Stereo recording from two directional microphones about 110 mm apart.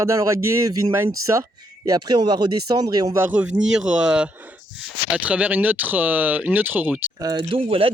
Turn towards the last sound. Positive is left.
turn(degrees=-60)  # may be behind; listen again after turning